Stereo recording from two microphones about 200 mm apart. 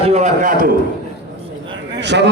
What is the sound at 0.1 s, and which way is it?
Speech, 40° right (ahead or behind).